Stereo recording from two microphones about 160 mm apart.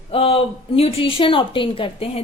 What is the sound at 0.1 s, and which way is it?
A man's voice, 35° left (ahead or behind).